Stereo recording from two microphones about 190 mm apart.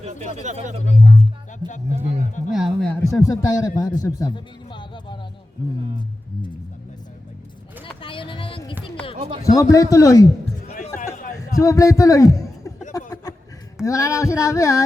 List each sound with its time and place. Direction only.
0.0 s speech: 35° right (ahead or behind)
1.5 s speech: 40° left (ahead or behind)
2.5 s speech: centre (ahead or behind)
3.2 s a man's voice: 20° left (ahead or behind)
8.0 s a sound: 25° left (ahead or behind)
9.1 s speech: 30° right (ahead or behind)
9.6 s a sound: 15° left (ahead or behind)
10.4 s music: 35° left (ahead or behind)
11.5 s a man's voice: 15° left (ahead or behind)
12.9 s a sound: 15° left (ahead or behind)